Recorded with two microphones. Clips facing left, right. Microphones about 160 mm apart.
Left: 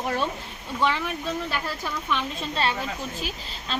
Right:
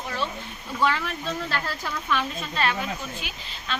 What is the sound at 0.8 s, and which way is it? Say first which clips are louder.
Speech: even; 15° left (ahead or behind).